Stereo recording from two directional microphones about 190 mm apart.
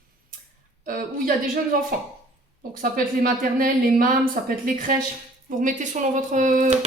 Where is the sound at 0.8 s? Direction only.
50° right (ahead or behind).